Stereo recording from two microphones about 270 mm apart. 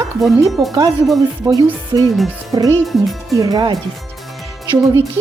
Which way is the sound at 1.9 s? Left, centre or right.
Centre.